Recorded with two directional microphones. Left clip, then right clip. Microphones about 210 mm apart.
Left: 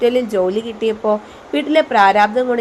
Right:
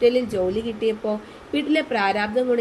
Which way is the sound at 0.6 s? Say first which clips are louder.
Left 4 dB; 45° left (ahead or behind).